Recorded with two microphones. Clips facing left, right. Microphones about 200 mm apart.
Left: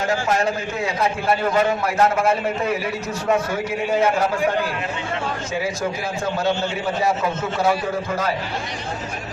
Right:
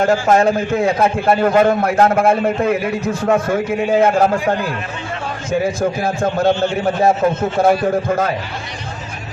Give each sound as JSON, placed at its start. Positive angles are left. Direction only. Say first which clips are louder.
{"t": 0.0, "sound": "a man's voice", "louder": "right 7 dB", "side_deg": -50}
{"t": 5.5, "sound": "a man's voice", "louder": "right 10 dB", "side_deg": -55}